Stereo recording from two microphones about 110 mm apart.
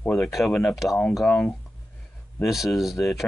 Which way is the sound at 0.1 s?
Centre (ahead or behind).